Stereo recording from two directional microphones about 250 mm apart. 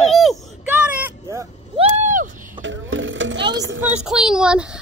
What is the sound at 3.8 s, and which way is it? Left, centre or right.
Speech, centre.